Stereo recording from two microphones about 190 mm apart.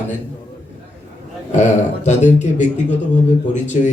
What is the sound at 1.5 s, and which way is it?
Speech, 40° left (ahead or behind).